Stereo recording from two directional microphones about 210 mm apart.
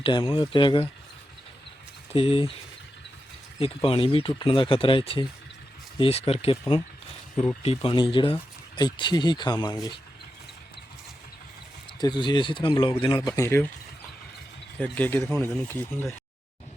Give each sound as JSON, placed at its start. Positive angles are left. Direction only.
{"t": 0.0, "sound": "speech", "side_deg": 25}
{"t": 2.1, "sound": "speech", "side_deg": 25}
{"t": 3.6, "sound": "speech", "side_deg": 25}
{"t": 11.9, "sound": "speech", "side_deg": 20}
{"t": 14.8, "sound": "speech", "side_deg": 5}